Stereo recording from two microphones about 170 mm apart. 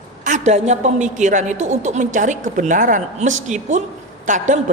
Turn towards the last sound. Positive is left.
turn(degrees=-45)  # may be behind; listen again after turning